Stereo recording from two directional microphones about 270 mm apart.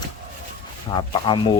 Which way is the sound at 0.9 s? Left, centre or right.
Centre.